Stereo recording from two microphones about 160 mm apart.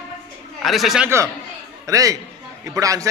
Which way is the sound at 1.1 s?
15° right (ahead or behind).